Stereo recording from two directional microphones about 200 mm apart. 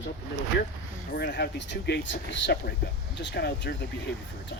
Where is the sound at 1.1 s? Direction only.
50° left (ahead or behind).